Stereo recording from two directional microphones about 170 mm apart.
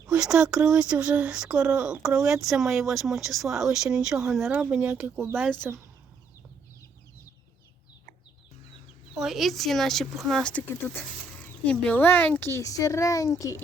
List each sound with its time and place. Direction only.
0.1 s speech: 5° right (ahead or behind)
9.1 s speech: centre (ahead or behind); by 13.6 s 20° left (ahead or behind)